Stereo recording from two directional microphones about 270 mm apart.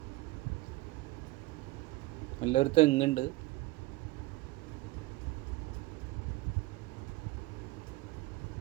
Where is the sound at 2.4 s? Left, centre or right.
Left.